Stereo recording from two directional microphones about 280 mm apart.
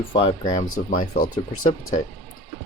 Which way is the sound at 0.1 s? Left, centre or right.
Centre.